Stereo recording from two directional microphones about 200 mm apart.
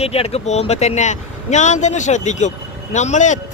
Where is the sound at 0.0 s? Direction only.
30° left (ahead or behind).